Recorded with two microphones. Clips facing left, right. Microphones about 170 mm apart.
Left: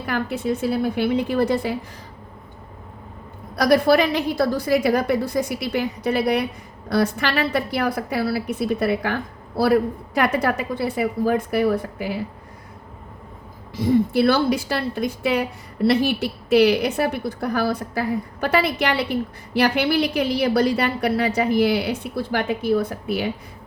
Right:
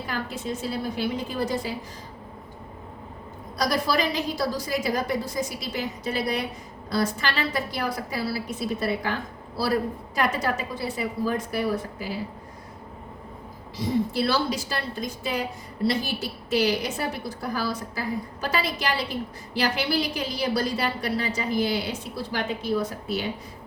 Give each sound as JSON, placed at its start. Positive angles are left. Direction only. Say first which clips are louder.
{"t": 0.0, "sound": "a woman's voice", "louder": "left 7 dB", "side_deg": 60}
{"t": 3.5, "sound": "a woman's voice", "louder": "left 9 dB", "side_deg": 60}
{"t": 13.7, "sound": "a woman's voice", "louder": "left 7 dB", "side_deg": 55}